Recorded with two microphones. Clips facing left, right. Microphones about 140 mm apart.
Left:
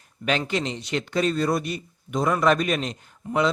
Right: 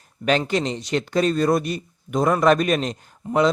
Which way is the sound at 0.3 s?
40° right (ahead or behind).